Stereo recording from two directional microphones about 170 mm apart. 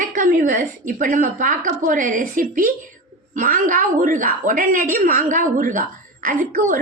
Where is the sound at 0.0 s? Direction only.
50° right (ahead or behind).